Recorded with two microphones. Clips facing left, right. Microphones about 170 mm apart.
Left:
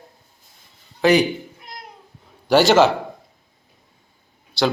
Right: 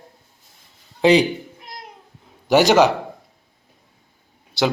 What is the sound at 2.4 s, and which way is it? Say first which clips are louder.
Speech: even; 20° right (ahead or behind).